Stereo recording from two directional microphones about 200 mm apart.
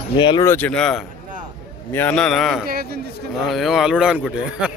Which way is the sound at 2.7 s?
50° right (ahead or behind).